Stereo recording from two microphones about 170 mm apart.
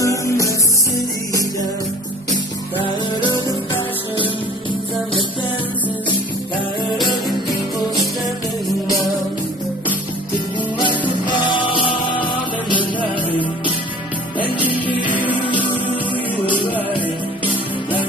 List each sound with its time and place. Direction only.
0.0 s music: 20° left (ahead or behind)
3.2 s music: 30° right (ahead or behind)
11.2 s music: 30° left (ahead or behind)
14.9 s music: 30° left (ahead or behind)